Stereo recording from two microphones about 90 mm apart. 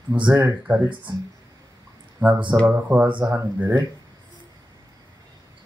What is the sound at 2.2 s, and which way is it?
Speech, 15° right (ahead or behind).